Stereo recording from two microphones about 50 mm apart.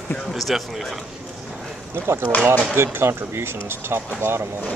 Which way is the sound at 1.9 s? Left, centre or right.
Right.